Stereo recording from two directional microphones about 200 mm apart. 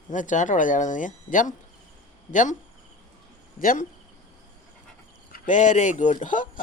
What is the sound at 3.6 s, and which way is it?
Speech, 45° left (ahead or behind).